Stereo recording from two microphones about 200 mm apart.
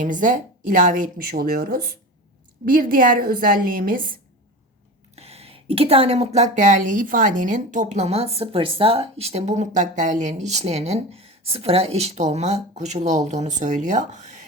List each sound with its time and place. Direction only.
0.0 s a woman's voice: 40° right (ahead or behind)
5.1 s speech: 30° right (ahead or behind)